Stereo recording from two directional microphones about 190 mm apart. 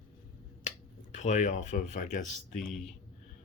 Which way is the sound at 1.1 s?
40° left (ahead or behind).